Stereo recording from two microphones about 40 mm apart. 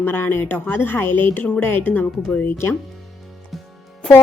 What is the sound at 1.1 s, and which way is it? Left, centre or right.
Speech, left.